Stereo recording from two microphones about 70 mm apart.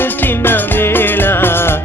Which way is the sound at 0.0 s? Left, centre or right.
Left.